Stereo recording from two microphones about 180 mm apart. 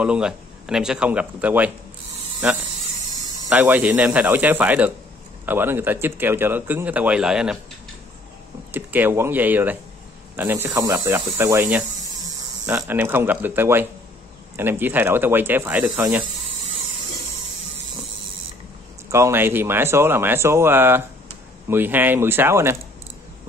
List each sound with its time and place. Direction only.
0.0 s a man's voice: 5° right (ahead or behind)
3.4 s a man's voice: 10° right (ahead or behind)
8.7 s a man's voice: 10° right (ahead or behind)
19.0 s a man's voice: 15° right (ahead or behind)